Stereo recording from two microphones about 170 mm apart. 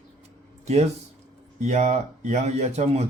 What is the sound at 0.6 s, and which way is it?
A man's voice, 40° right (ahead or behind).